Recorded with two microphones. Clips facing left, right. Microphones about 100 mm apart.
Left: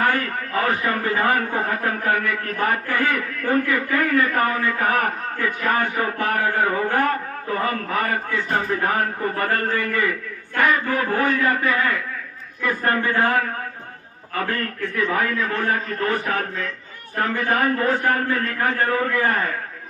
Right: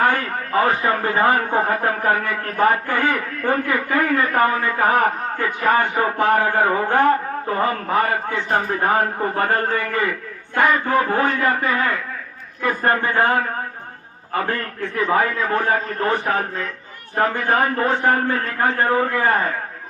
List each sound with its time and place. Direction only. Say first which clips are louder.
0.6 s a man's voice: right 3 dB; 30° right (ahead or behind)
12.6 s a man's voice: right 2 dB; 30° right (ahead or behind)